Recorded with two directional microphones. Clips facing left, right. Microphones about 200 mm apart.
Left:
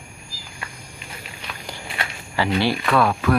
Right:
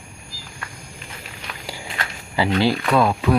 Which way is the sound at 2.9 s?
15° right (ahead or behind).